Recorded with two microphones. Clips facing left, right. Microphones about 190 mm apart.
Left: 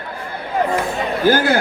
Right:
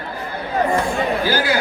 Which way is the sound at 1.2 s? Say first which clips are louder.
Left 5 dB; 50° left (ahead or behind).